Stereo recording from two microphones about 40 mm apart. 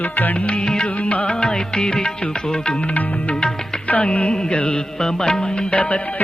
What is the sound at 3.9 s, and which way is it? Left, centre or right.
Music, left.